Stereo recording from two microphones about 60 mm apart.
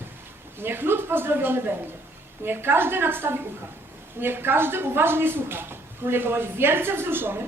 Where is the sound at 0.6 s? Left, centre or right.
Right.